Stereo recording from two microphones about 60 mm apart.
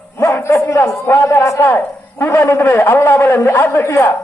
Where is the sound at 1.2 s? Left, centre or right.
Left.